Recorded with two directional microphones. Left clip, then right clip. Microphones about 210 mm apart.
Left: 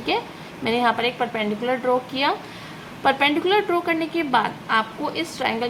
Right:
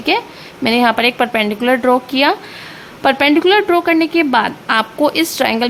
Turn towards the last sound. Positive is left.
turn(degrees=-45)  # may be behind; listen again after turning